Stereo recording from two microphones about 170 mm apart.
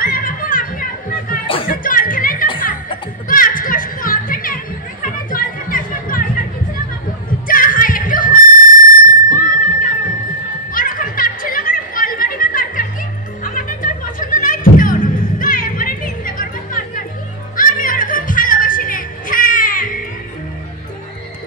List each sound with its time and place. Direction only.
0.0 s music: 55° left (ahead or behind)
5.3 s a sound: 55° left (ahead or behind)
7.4 s music: 55° left (ahead or behind)
10.7 s chatter: 55° left (ahead or behind)
13.4 s music: 55° left (ahead or behind)